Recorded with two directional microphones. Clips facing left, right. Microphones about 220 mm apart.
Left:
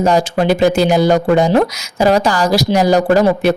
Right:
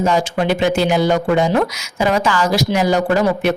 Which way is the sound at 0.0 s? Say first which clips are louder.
Left 3 dB; 40° left (ahead or behind).